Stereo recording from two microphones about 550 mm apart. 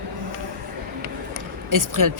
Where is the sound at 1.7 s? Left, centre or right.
Right.